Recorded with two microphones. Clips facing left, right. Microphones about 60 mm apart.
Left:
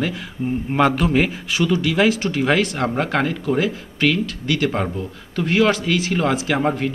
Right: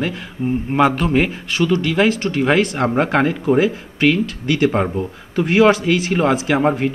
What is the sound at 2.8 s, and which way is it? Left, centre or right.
Speech, centre.